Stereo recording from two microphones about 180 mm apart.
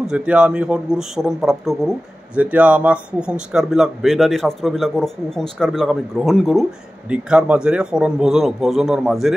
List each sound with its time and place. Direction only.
0.0 s speech: 5° right (ahead or behind)